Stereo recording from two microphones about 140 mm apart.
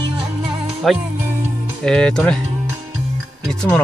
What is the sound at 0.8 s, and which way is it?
Speech, centre (ahead or behind).